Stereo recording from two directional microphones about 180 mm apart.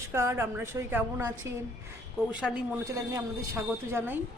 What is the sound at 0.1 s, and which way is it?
A woman's voice, 15° right (ahead or behind).